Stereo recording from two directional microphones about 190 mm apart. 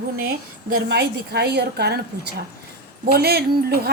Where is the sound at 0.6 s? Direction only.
75° right (ahead or behind); by 2.0 s 60° right (ahead or behind).